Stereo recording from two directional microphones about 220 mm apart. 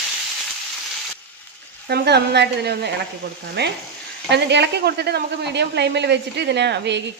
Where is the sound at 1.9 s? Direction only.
50° right (ahead or behind).